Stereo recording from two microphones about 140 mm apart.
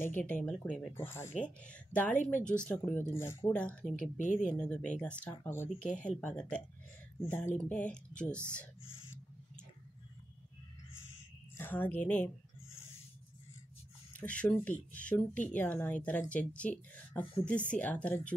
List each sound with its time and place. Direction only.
0.0 s speech: 10° left (ahead or behind)
0.9 s speech: 15° left (ahead or behind)
3.5 s speech: 10° left (ahead or behind)
3.9 s speech: 65° left (ahead or behind)
4.5 s speech: 10° left (ahead or behind)
5.8 s speech: 60° left (ahead or behind)
6.0 s speech: 5° left (ahead or behind)
7.5 s speech: 10° left (ahead or behind)
11.5 s speech: 15° left (ahead or behind)
14.1 s speech: 10° left (ahead or behind)